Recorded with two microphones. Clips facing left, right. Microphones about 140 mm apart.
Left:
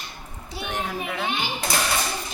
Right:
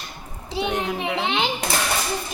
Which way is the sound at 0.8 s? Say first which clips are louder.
Right 4 dB; 90° right.